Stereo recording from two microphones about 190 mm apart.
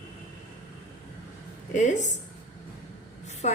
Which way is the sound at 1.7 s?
40° left (ahead or behind).